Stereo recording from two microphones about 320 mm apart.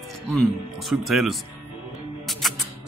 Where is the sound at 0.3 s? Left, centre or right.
Centre.